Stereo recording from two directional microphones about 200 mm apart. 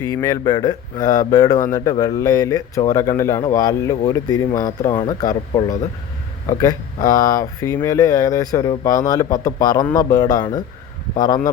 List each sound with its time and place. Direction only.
0.1 s a man's voice: 20° left (ahead or behind)